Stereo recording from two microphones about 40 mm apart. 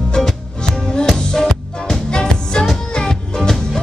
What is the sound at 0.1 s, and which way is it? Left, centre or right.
Music, centre.